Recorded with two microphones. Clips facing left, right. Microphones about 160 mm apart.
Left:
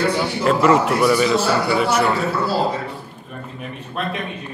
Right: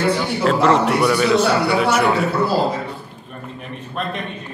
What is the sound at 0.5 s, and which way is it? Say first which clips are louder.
A man's voice: even; 5° left (ahead or behind).